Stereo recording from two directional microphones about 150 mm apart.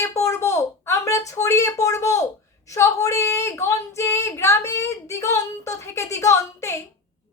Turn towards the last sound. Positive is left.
turn(degrees=20)  # may be behind; listen again after turning